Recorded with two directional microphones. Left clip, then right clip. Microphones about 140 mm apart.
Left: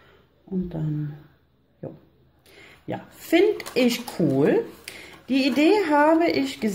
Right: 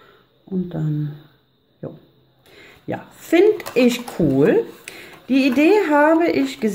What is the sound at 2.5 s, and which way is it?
Speech, 20° right (ahead or behind).